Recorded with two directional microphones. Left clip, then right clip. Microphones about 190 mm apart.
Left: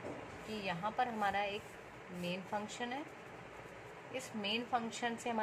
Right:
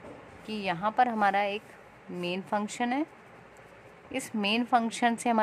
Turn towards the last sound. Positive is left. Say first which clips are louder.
# right 12 dB
turn(degrees=-55)  # may be behind; listen again after turning